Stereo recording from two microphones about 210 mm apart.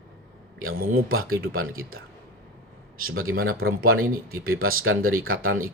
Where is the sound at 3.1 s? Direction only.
75° right (ahead or behind).